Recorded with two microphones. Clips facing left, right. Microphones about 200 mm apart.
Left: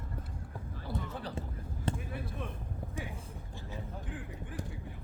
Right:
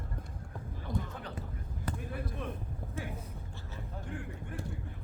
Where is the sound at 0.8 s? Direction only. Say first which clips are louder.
Even; 30° left (ahead or behind).